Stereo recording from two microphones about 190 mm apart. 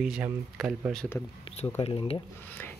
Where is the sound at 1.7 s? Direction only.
30° left (ahead or behind).